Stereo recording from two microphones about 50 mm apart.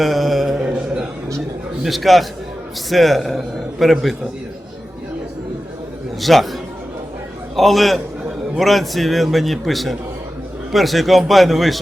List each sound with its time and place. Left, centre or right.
0.0 s mantra: centre
0.6 s mantra: right
1.8 s a man's voice: centre
6.1 s a man's voice: centre